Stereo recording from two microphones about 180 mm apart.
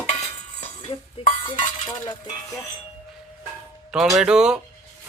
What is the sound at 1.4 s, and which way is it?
Stir, 25° left (ahead or behind).